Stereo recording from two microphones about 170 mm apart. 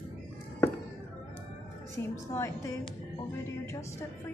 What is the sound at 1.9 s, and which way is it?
A woman's voice, 15° left (ahead or behind).